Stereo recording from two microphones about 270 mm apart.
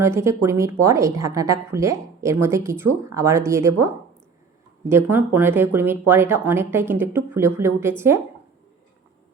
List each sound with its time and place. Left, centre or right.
0.0 s speech: centre
4.9 s speech: centre